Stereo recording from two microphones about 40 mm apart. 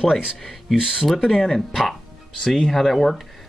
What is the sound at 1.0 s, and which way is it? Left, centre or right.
Speech, centre.